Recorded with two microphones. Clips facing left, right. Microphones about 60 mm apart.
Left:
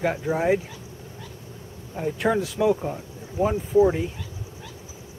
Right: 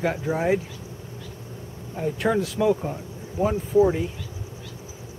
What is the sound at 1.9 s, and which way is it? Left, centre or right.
Speech, centre.